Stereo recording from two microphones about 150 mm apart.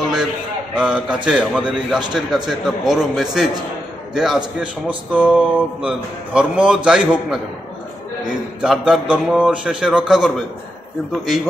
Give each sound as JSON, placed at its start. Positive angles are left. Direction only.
{"t": 0.7, "sound": "a man's voice", "side_deg": -5}
{"t": 8.5, "sound": "speech", "side_deg": -5}